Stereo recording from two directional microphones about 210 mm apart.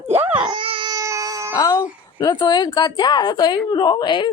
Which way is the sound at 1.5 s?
20° left (ahead or behind).